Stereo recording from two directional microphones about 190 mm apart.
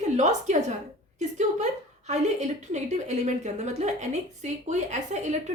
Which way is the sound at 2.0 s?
40° right (ahead or behind).